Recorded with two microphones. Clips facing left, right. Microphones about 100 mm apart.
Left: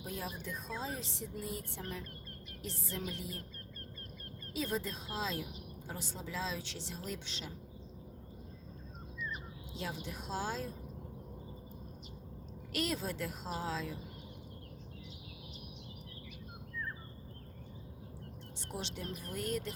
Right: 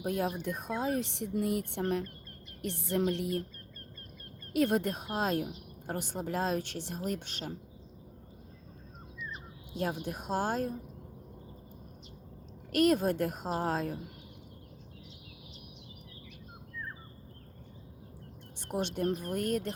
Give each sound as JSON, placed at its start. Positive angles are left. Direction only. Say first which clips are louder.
{"t": 0.0, "sound": "speech", "louder": "right 10 dB", "side_deg": -60}
{"t": 4.5, "sound": "speech", "louder": "right 9 dB", "side_deg": -65}
{"t": 9.7, "sound": "a woman's voice", "louder": "right 8 dB", "side_deg": -50}
{"t": 12.7, "sound": "a woman's voice", "louder": "right 11 dB", "side_deg": -55}
{"t": 18.6, "sound": "a woman's voice", "louder": "right 11 dB", "side_deg": -55}